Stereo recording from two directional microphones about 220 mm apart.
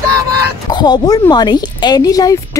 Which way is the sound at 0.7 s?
20° left (ahead or behind).